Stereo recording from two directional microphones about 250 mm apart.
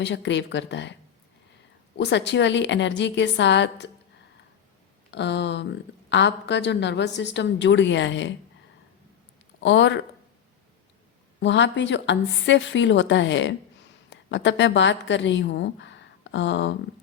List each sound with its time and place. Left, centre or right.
0.0 s a woman's voice: left
2.0 s a woman's voice: left
5.1 s a woman's voice: left
9.6 s speech: left
11.3 s a woman's voice: left